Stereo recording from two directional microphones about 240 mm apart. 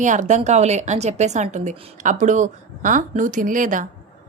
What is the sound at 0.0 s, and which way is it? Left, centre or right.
A woman's voice, right.